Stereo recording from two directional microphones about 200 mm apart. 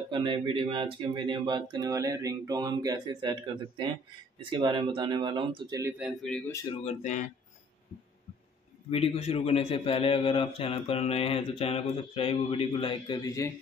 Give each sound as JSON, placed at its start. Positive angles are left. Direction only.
{"t": 0.1, "sound": "speech", "side_deg": -25}
{"t": 5.9, "sound": "speech", "side_deg": -5}
{"t": 6.3, "sound": "speech", "side_deg": 10}
{"t": 6.7, "sound": "speech", "side_deg": 30}
{"t": 8.9, "sound": "a man's voice", "side_deg": 30}